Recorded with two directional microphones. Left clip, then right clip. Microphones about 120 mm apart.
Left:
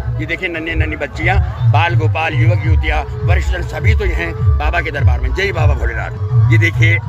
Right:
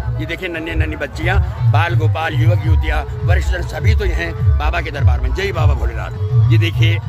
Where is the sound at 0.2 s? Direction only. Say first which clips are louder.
Left 3 dB; 15° right (ahead or behind).